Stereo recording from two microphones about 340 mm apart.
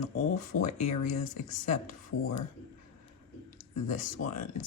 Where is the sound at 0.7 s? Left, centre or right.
Left.